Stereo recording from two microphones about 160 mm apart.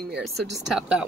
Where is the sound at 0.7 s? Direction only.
5° right (ahead or behind).